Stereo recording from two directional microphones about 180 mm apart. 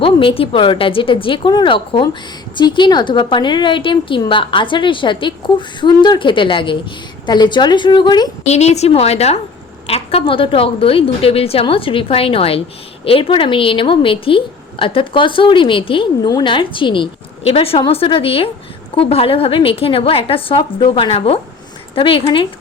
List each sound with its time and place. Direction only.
0.0 s a woman's voice: 30° left (ahead or behind)
8.4 s a woman's voice: 35° left (ahead or behind)